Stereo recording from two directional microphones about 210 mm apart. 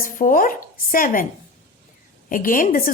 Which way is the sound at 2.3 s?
40° left (ahead or behind).